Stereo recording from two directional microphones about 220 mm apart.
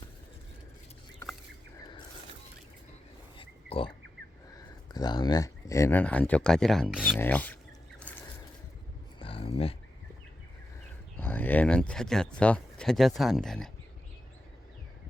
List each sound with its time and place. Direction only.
3.3 s a sound: 25° left (ahead or behind)
4.5 s speech: 20° left (ahead or behind)
9.1 s dog: 25° left (ahead or behind)
11.2 s speech: 10° left (ahead or behind)